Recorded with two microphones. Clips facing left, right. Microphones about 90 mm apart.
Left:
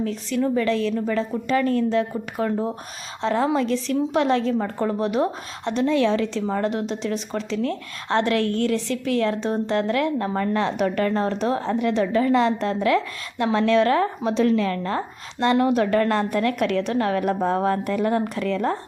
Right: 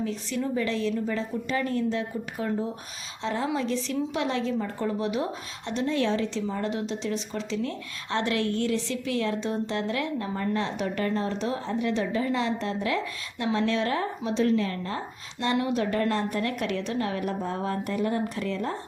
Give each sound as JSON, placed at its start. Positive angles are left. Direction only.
{"t": 0.0, "sound": "a woman's voice", "side_deg": 65}
{"t": 13.4, "sound": "speech", "side_deg": 75}